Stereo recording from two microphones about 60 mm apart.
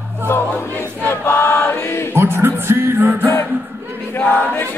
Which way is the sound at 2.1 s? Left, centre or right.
Right.